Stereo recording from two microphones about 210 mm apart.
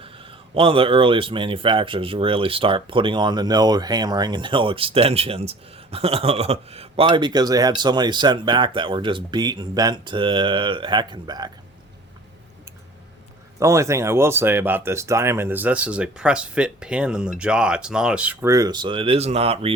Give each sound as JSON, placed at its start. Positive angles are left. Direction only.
{"t": 0.0, "sound": "speech", "side_deg": -25}
{"t": 13.6, "sound": "speech", "side_deg": -15}